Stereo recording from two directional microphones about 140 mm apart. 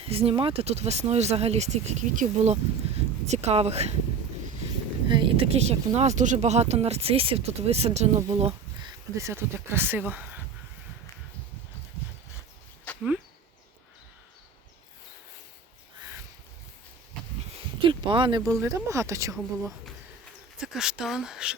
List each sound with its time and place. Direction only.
0.0 s speech: 45° right (ahead or behind)
5.0 s speech: 35° right (ahead or behind)
9.1 s speech: 20° right (ahead or behind)
12.9 s a sound: 10° left (ahead or behind)
17.8 s speech: 35° right (ahead or behind)
18.6 s speech: 20° right (ahead or behind)
20.6 s speech: 5° right (ahead or behind)